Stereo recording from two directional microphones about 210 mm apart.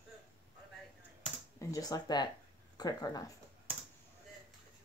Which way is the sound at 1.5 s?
15° left (ahead or behind).